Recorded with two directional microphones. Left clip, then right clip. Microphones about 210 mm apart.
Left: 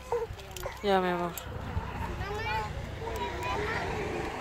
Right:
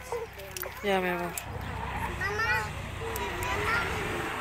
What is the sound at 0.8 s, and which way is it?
Speech, 10° left (ahead or behind).